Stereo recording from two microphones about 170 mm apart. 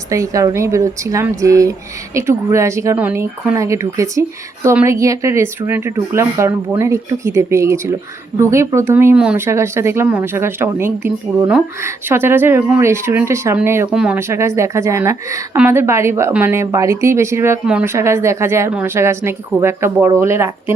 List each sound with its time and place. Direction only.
0.1 s speech: 20° right (ahead or behind)